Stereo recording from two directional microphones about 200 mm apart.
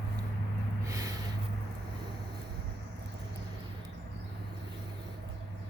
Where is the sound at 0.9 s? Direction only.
15° right (ahead or behind).